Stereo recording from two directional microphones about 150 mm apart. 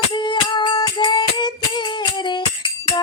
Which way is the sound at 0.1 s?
30° left (ahead or behind).